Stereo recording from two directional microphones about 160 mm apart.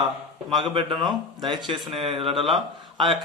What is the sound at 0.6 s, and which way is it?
Speech, 30° right (ahead or behind).